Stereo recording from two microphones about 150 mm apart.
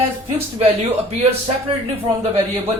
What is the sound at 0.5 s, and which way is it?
Speech, 45° right (ahead or behind).